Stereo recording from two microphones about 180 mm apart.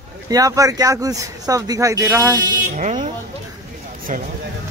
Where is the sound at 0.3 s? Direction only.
20° right (ahead or behind).